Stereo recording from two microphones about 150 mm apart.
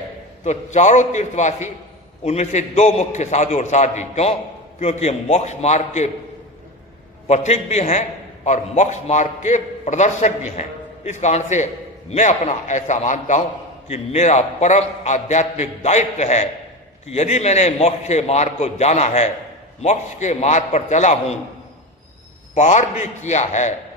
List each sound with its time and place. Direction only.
0.4 s a man's voice: 50° left (ahead or behind)
7.2 s a man's voice: 50° left (ahead or behind)
22.5 s a man's voice: 55° left (ahead or behind)